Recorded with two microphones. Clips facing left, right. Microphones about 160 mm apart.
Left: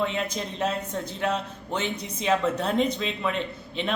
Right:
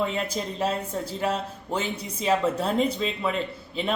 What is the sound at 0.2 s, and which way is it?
Speech, 5° right (ahead or behind).